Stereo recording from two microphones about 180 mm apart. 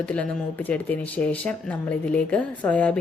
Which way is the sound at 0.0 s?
5° left (ahead or behind).